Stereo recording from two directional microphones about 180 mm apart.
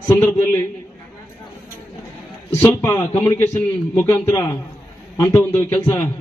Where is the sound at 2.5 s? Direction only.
15° left (ahead or behind).